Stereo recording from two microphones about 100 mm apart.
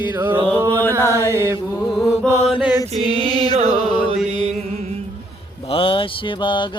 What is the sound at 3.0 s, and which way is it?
Music, 65° right (ahead or behind).